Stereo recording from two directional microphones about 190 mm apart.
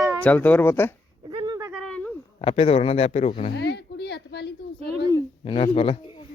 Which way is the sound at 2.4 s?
30° left (ahead or behind).